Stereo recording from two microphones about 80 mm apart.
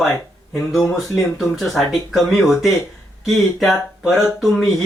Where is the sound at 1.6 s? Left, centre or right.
Centre.